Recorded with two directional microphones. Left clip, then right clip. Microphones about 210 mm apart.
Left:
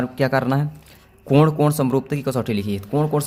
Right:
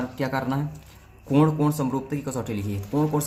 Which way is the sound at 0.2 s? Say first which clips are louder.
Left 8 dB; 50° left (ahead or behind).